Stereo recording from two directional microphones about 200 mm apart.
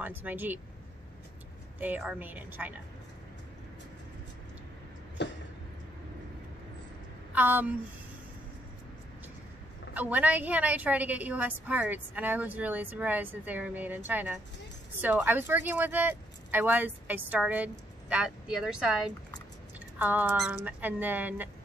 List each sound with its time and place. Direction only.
0.0 s a woman's voice: 10° right (ahead or behind)
1.8 s a woman's voice: 10° right (ahead or behind)
5.2 s a sound: 60° left (ahead or behind)
7.3 s a woman's voice: 10° right (ahead or behind)
9.9 s a woman's voice: 10° right (ahead or behind)